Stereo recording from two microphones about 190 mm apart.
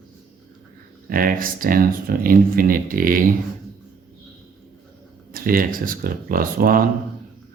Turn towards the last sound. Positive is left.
turn(degrees=-50)  # may be behind; listen again after turning